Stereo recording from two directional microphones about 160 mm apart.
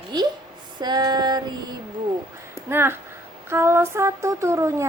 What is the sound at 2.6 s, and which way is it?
Speech, 15° right (ahead or behind).